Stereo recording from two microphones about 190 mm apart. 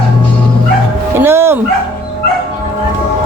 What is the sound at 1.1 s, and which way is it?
Bow-wow, 10° right (ahead or behind).